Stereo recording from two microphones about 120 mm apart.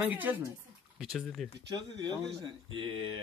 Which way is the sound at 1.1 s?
5° left (ahead or behind).